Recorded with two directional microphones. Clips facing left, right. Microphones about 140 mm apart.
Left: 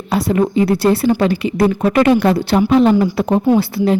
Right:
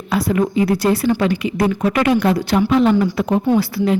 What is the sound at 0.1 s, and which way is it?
Speech, 30° left (ahead or behind).